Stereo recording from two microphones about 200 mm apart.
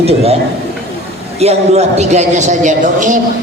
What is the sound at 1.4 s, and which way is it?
A man's voice, 30° right (ahead or behind).